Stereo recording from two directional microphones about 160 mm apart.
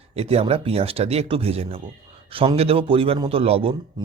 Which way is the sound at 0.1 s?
40° right (ahead or behind).